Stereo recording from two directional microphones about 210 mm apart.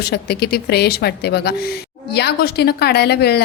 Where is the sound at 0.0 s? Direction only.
50° left (ahead or behind).